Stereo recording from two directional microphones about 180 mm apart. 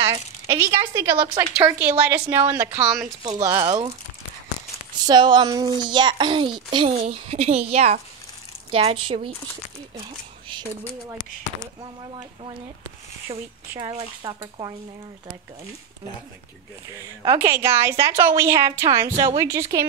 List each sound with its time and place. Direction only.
0.0 s a woman's voice: 15° right (ahead or behind)
4.9 s a woman's voice: 25° right (ahead or behind)
13.3 s speech: 30° right (ahead or behind)
16.9 s a woman's voice: 20° right (ahead or behind)